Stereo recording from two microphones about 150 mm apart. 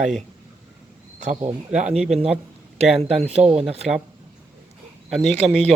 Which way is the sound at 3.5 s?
5° right (ahead or behind).